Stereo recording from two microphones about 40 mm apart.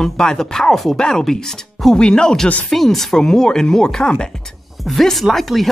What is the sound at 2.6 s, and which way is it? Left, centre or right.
Speech, centre.